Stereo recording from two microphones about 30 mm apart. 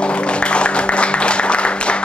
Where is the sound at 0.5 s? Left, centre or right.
Left.